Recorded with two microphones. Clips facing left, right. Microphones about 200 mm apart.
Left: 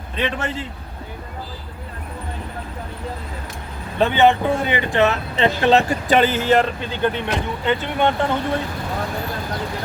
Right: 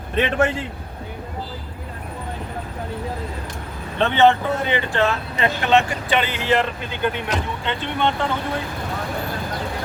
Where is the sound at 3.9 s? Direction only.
10° left (ahead or behind); by 6.8 s 40° left (ahead or behind).